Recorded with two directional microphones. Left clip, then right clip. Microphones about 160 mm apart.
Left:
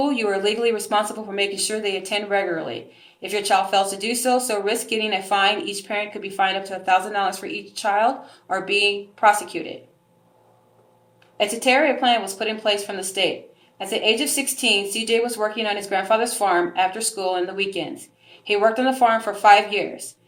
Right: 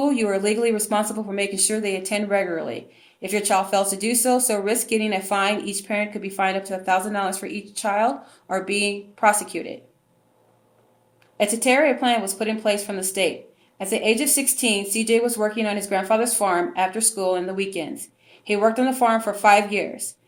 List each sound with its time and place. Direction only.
0.0 s speech: 35° right (ahead or behind)
11.3 s speech: 30° right (ahead or behind)